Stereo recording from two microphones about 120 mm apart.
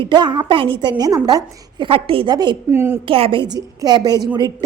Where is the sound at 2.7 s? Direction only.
20° right (ahead or behind).